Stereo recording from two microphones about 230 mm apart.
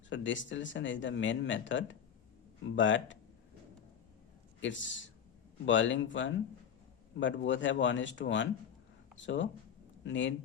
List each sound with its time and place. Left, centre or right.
0.1 s speech: left
4.6 s speech: left